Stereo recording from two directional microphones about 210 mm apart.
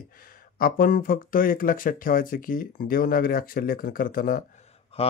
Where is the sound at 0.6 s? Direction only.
45° left (ahead or behind).